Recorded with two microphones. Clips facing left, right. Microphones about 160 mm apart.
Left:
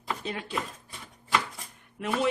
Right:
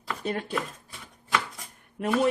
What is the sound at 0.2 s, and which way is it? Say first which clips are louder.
Speech: right 5 dB; 50° right (ahead or behind).